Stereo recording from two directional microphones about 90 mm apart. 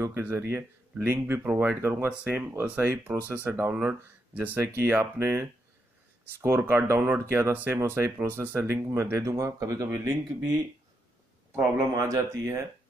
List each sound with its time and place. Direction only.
0.0 s speech: 25° right (ahead or behind)